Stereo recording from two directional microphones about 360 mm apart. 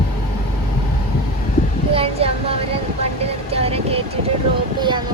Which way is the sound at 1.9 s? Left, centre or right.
Centre.